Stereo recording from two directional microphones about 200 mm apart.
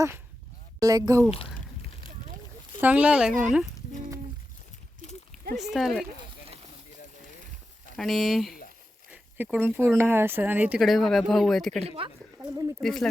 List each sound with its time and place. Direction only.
0.8 s speech: 15° right (ahead or behind)
2.8 s speech: 5° right (ahead or behind)
5.5 s speech: centre (ahead or behind)
7.9 s speech: centre (ahead or behind)
9.0 s a sound: 5° right (ahead or behind)
10.0 s speech: 10° right (ahead or behind)
11.8 s speech: 30° right (ahead or behind)
12.4 s speech: 15° right (ahead or behind)
12.8 s speech: centre (ahead or behind)